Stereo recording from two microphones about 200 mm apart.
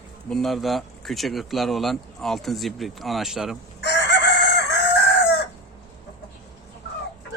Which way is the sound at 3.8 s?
60° left (ahead or behind).